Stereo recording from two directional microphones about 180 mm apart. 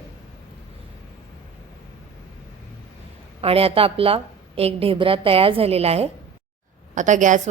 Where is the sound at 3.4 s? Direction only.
30° right (ahead or behind).